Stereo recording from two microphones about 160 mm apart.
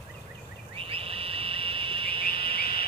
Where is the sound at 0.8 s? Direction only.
35° right (ahead or behind).